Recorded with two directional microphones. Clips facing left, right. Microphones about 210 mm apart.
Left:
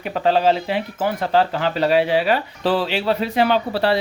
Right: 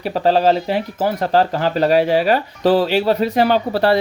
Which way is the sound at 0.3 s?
40° right (ahead or behind).